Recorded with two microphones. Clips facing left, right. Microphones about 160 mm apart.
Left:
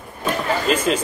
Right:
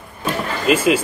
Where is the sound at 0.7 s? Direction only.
10° right (ahead or behind).